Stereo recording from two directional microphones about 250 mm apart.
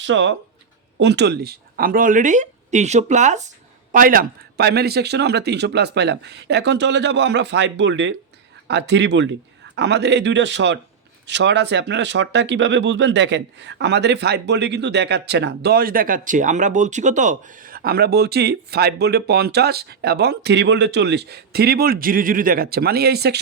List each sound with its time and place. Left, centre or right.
0.0 s speech: right